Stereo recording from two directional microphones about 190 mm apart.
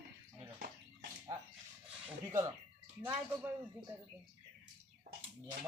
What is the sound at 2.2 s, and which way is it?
Speech, 15° right (ahead or behind).